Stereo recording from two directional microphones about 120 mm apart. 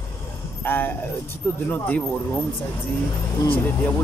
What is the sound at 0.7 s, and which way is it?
Speech, 15° left (ahead or behind).